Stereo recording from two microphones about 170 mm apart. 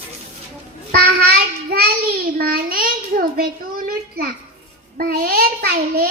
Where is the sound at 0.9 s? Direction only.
60° right (ahead or behind).